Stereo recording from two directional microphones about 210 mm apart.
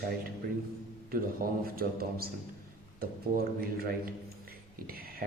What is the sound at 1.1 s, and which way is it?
A man's voice, 45° right (ahead or behind).